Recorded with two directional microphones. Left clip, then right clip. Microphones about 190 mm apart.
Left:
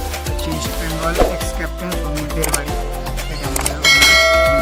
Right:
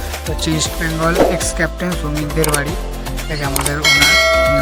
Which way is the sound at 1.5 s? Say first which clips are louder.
Right 6 dB; 25° right (ahead or behind).